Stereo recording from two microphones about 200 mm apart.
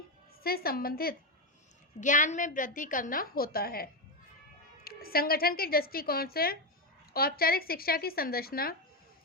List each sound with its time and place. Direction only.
0.4 s a woman's voice: 50° left (ahead or behind)